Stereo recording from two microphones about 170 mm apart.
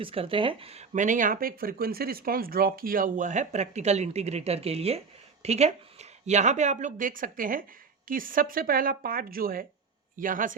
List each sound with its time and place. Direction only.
0.0 s speech: 35° right (ahead or behind); by 10.5 s 50° right (ahead or behind)